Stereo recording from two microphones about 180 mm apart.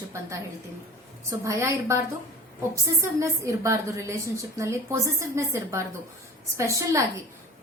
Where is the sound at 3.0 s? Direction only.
15° right (ahead or behind).